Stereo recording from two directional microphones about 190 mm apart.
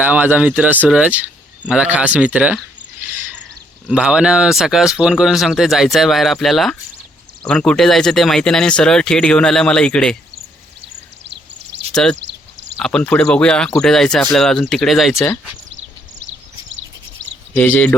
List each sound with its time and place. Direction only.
0.0 s speech: 10° right (ahead or behind)
12.2 s a sound: 65° right (ahead or behind)
12.8 s speech: 5° left (ahead or behind)
17.5 s speech: 10° left (ahead or behind)